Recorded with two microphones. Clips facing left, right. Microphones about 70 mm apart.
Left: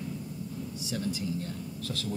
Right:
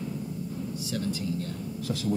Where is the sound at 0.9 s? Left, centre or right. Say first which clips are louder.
Right 1 dB; centre.